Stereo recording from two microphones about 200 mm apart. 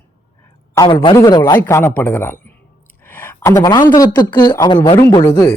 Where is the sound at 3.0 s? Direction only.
10° left (ahead or behind).